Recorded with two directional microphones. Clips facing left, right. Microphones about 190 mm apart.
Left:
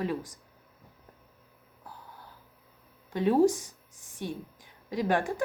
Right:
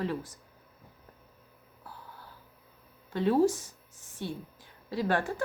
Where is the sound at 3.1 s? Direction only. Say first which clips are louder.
Left 2 dB; 15° left (ahead or behind).